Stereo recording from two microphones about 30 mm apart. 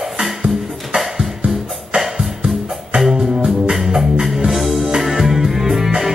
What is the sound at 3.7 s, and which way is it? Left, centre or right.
Music, centre.